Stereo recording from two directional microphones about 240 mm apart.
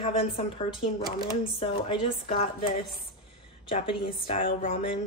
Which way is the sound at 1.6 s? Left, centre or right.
Left.